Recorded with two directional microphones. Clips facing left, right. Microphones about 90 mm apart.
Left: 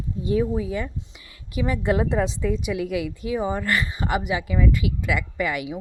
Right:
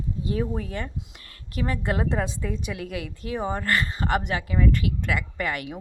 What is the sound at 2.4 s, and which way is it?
Speech, 20° right (ahead or behind).